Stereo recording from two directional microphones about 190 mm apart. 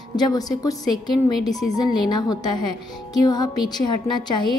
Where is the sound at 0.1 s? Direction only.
20° left (ahead or behind).